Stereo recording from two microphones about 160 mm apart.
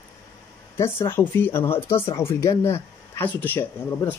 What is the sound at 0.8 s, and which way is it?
Speech, 15° left (ahead or behind).